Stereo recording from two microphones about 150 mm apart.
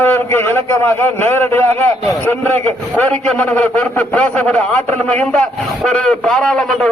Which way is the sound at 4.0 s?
10° left (ahead or behind).